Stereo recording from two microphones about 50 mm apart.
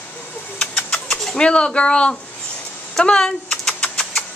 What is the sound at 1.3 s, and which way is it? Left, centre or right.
Speech, left.